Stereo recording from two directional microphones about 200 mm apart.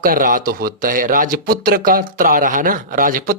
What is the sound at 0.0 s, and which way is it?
Speech, 45° right (ahead or behind).